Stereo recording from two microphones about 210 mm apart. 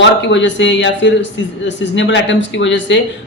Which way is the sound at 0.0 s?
60° left (ahead or behind).